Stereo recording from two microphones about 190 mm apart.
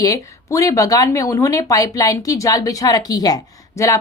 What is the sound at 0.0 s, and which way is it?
Speech, 15° left (ahead or behind).